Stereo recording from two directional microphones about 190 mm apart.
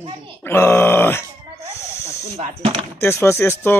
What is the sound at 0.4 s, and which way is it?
Grunt, 10° left (ahead or behind).